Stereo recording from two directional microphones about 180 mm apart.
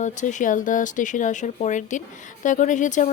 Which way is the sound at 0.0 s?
45° left (ahead or behind).